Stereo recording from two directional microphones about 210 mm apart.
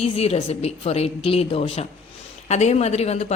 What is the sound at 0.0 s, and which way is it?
A woman's voice, 30° left (ahead or behind).